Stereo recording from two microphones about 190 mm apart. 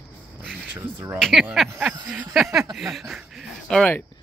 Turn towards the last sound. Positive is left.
turn(degrees=5)  # may be behind; listen again after turning